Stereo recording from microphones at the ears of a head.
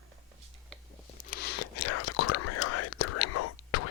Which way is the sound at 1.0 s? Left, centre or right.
Left.